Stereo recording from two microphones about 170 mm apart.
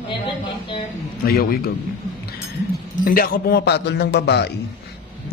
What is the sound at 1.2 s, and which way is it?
Speech, 65° left (ahead or behind).